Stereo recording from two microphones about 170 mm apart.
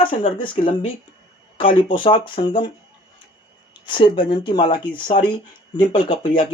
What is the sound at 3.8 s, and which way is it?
Speech, 30° left (ahead or behind).